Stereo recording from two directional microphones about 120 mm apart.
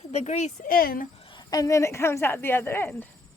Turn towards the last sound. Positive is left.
turn(degrees=15)  # may be behind; listen again after turning